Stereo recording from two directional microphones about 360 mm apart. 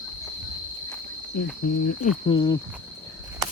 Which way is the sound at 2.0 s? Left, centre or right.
Centre.